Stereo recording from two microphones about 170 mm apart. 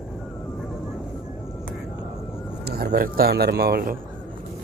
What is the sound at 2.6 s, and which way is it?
Speech, 65° right (ahead or behind).